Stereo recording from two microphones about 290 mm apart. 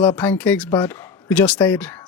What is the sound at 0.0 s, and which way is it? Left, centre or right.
Speech, centre.